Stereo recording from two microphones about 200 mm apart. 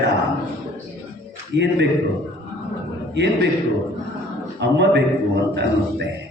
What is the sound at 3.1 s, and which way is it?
Speech, 60° right (ahead or behind).